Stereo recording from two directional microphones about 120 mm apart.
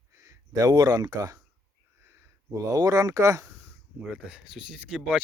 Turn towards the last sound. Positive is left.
turn(degrees=-5)  # may be behind; listen again after turning